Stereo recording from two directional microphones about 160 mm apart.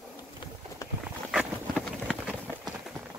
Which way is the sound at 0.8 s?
20° left (ahead or behind).